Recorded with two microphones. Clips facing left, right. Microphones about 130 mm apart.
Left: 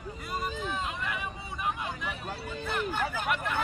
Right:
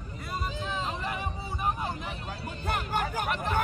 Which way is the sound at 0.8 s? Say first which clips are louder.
Right 2 dB; 35° right (ahead or behind).